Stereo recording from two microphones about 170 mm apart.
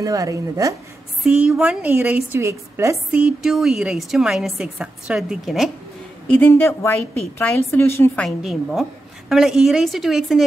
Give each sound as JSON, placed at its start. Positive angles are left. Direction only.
{"t": 0.0, "sound": "speech", "side_deg": -20}
{"t": 1.2, "sound": "a woman's voice", "side_deg": -5}
{"t": 3.1, "sound": "a woman's voice", "side_deg": -5}
{"t": 6.3, "sound": "a woman's voice", "side_deg": 10}
{"t": 8.2, "sound": "a woman's voice", "side_deg": 0}